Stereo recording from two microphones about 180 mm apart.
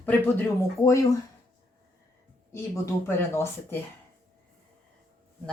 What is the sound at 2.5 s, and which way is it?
Speech, 15° left (ahead or behind).